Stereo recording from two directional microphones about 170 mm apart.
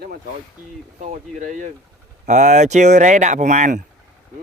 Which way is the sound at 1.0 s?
45° right (ahead or behind).